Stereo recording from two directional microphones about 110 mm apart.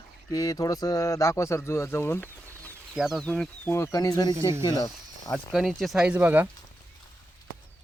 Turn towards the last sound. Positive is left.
turn(degrees=-15)  # may be behind; listen again after turning